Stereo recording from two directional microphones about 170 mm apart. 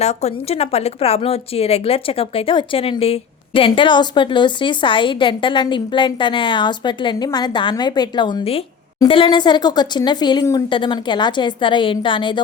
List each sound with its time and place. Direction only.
0.0 s speech: 40° left (ahead or behind)